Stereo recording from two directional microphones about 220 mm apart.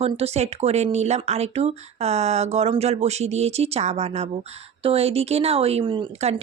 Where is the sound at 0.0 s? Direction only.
30° right (ahead or behind).